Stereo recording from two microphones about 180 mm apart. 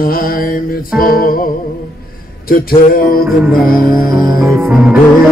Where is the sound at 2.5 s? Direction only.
55° left (ahead or behind).